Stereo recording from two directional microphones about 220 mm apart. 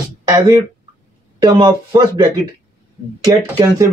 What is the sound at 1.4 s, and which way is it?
Speech, 20° right (ahead or behind).